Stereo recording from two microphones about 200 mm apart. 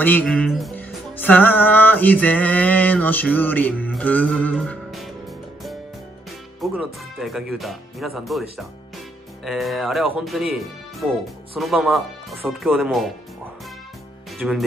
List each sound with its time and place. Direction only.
0.0 s music: 10° left (ahead or behind)
6.6 s speech: centre (ahead or behind)
14.4 s speech: centre (ahead or behind)